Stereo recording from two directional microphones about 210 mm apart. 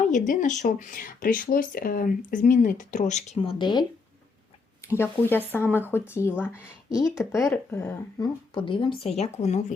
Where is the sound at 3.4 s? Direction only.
20° left (ahead or behind).